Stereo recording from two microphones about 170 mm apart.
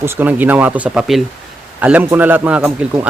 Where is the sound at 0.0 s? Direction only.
15° right (ahead or behind).